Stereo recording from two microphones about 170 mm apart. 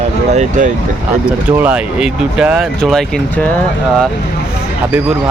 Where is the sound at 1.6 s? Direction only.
5° right (ahead or behind).